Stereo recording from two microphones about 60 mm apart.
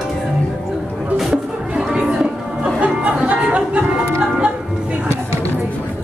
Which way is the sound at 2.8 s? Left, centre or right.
Right.